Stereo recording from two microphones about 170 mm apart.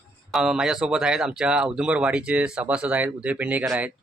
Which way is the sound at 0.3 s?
Centre (ahead or behind).